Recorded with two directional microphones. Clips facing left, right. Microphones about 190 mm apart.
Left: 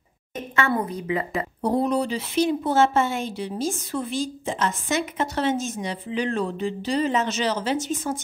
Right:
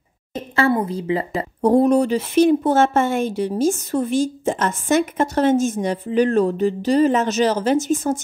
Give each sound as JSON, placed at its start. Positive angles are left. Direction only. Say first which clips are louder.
{"t": 0.3, "sound": "speech", "louder": "right 5 dB", "side_deg": -30}
{"t": 1.6, "sound": "speech", "louder": "right 8 dB", "side_deg": -50}